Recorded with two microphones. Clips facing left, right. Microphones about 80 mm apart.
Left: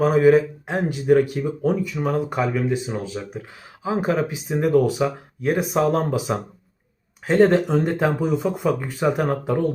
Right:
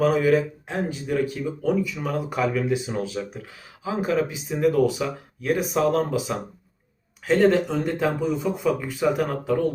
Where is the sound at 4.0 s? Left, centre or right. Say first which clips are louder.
Even; left.